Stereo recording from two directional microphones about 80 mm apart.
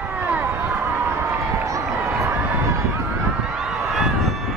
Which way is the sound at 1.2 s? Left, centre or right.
Right.